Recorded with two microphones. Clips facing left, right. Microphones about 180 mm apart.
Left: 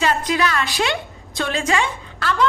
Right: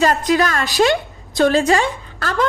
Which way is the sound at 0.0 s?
45° right (ahead or behind).